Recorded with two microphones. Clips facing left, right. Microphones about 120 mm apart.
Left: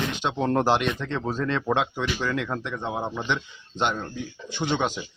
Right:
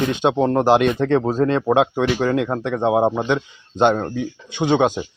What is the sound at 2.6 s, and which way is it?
Speech, 65° right (ahead or behind).